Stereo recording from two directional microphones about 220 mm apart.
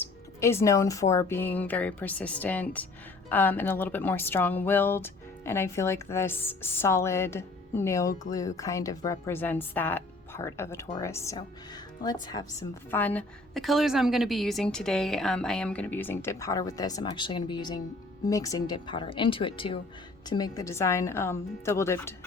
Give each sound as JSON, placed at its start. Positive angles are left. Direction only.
{"t": 0.0, "sound": "speech", "side_deg": 10}
{"t": 12.9, "sound": "a woman's voice", "side_deg": 10}